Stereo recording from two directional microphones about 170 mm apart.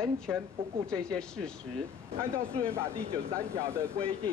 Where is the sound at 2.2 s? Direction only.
15° right (ahead or behind).